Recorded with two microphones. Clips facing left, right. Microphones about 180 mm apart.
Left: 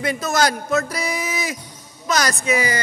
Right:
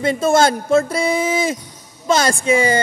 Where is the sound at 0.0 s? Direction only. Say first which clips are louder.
Right 6 dB; 25° right (ahead or behind).